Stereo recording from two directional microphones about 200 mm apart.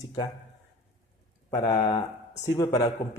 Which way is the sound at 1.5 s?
25° left (ahead or behind).